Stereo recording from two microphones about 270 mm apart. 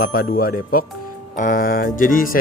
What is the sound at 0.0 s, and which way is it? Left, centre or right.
Speech, left.